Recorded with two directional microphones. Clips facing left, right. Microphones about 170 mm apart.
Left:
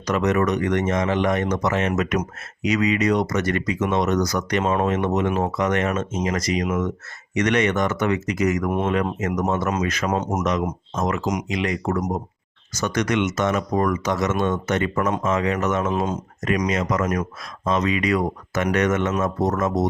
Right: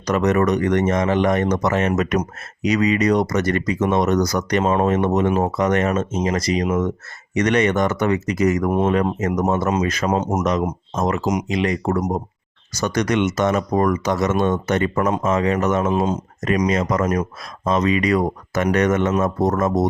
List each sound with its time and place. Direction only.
0.0 s speech: 40° right (ahead or behind)